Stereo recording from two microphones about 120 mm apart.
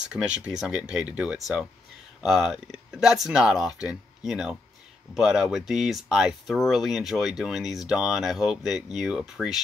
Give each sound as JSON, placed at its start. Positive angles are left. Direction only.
{"t": 0.1, "sound": "speech", "side_deg": -10}